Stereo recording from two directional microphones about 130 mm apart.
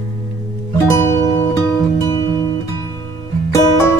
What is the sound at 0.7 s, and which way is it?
Music, 20° left (ahead or behind).